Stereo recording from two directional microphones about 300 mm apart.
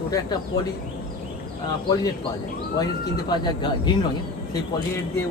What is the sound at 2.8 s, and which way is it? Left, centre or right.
Speech, centre.